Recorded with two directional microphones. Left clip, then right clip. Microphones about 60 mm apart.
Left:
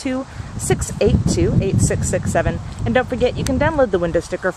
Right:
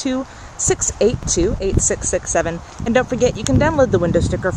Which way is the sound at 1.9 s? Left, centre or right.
Right.